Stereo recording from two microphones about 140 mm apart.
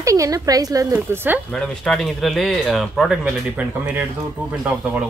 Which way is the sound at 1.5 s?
5° left (ahead or behind).